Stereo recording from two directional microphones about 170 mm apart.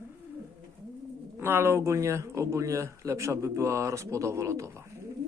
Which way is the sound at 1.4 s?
15° right (ahead or behind).